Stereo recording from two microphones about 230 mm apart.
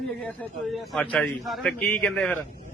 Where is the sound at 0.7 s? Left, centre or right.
Centre.